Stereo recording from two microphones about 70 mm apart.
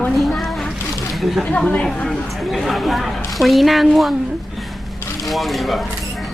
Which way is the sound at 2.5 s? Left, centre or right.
Centre.